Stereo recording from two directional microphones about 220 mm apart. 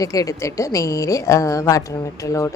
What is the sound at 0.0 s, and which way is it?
A woman's voice, 15° left (ahead or behind).